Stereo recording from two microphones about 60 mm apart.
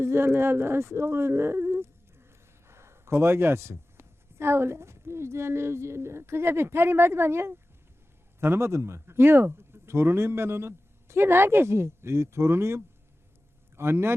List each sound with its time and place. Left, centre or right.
0.0 s a woman's voice: right